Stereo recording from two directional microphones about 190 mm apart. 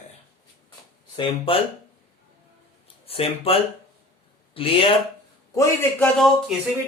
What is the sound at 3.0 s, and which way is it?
Speech, 30° left (ahead or behind).